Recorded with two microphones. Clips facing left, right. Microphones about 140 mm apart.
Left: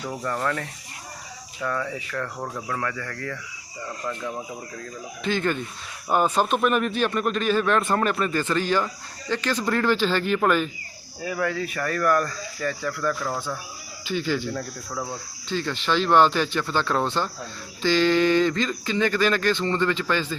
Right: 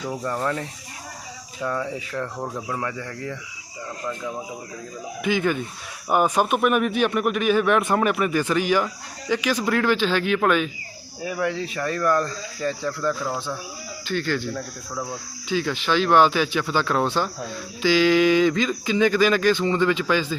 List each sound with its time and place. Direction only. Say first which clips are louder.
0.4 s speech: right 1 dB; 20° right (ahead or behind)
2.6 s speech: right 1 dB; 15° right (ahead or behind)
5.2 s speech: right 2 dB; 10° right (ahead or behind)
11.2 s speech: right 1 dB; 15° right (ahead or behind)
14.0 s speech: even; 5° left (ahead or behind)